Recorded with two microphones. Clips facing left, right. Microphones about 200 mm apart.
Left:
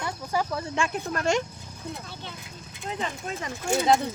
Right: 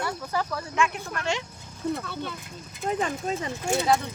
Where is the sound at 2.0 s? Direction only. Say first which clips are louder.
Right 7 dB; 60° right (ahead or behind).